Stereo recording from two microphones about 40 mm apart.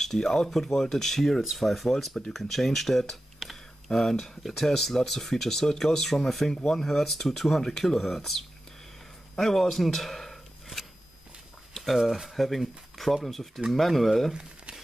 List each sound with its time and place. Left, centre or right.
0.0 s speech: centre
1.5 s speech: centre
6.9 s speech: centre
9.4 s a sound: centre
11.7 s speech: centre